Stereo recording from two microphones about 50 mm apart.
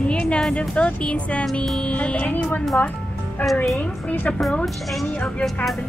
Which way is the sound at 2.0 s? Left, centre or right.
Left.